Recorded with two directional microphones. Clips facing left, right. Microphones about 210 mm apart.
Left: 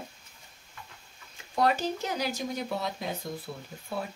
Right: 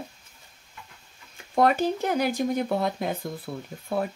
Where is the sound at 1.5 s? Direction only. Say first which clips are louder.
Right 5 dB; 55° right (ahead or behind).